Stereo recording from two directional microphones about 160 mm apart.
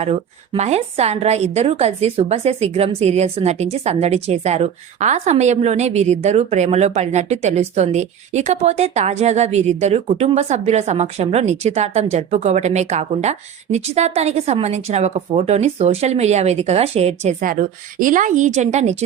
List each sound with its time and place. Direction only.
0.0 s a woman's voice: 40° right (ahead or behind)
17.4 s a woman's voice: 55° right (ahead or behind)